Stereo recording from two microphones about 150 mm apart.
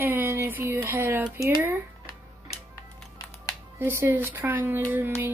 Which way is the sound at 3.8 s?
15° right (ahead or behind).